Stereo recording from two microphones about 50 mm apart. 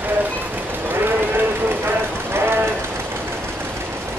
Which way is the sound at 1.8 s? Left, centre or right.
Right.